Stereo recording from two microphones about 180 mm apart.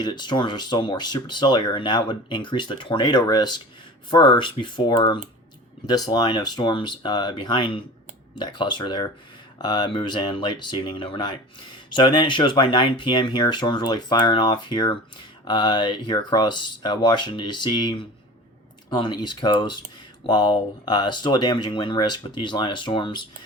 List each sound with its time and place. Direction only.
0.0 s speech: 25° left (ahead or behind)